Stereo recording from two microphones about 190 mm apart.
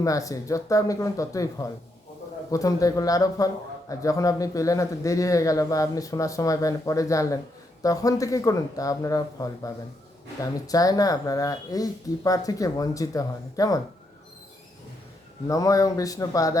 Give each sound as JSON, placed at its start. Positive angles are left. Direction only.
{"t": 0.0, "sound": "a man's voice", "side_deg": 15}
{"t": 15.4, "sound": "a man's voice", "side_deg": 15}